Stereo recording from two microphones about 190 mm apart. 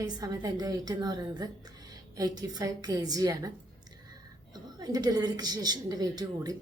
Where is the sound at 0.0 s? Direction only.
20° right (ahead or behind).